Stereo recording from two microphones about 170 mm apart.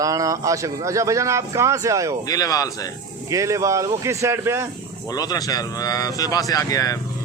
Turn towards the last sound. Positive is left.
turn(degrees=20)  # may be behind; listen again after turning